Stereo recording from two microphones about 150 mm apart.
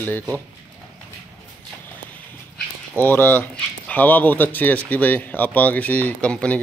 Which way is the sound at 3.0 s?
15° left (ahead or behind).